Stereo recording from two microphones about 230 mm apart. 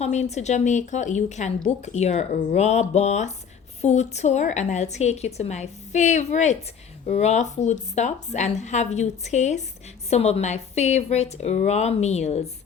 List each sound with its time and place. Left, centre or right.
0.0 s a woman's voice: left